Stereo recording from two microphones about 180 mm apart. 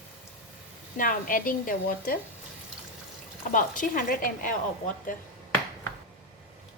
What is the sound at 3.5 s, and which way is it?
A woman's voice, 45° left (ahead or behind).